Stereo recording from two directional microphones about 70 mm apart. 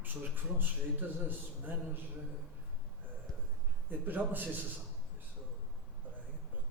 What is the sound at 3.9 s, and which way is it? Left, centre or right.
Speech, right.